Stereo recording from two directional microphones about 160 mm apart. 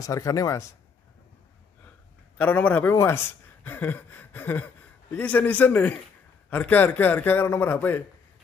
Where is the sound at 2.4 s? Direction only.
10° left (ahead or behind).